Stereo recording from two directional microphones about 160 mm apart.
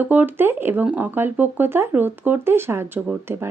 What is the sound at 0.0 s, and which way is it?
Speech, 10° right (ahead or behind).